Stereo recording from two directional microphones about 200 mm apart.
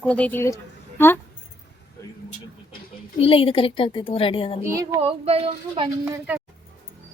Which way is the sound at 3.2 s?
30° left (ahead or behind).